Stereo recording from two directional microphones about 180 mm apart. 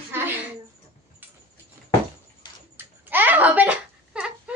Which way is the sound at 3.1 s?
10° right (ahead or behind).